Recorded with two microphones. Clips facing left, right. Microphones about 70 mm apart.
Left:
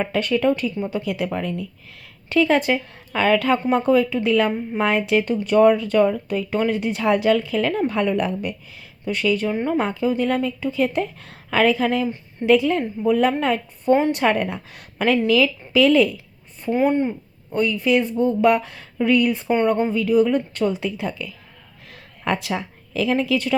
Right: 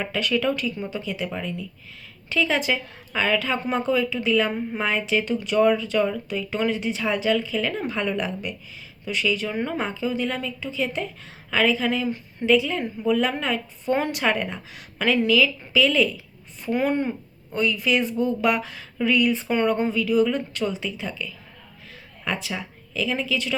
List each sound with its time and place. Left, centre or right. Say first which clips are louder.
0.0 s speech: left 4 dB; left
16.6 s a woman's voice: left 4 dB; left
19.5 s a woman's voice: left 3 dB; left